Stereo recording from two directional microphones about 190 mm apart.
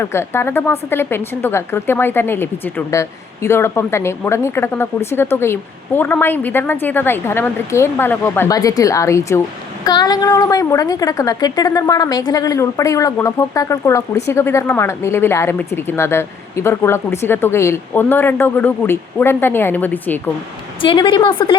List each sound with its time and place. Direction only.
0.0 s speech: 15° left (ahead or behind)
20.8 s a woman's voice: 25° left (ahead or behind)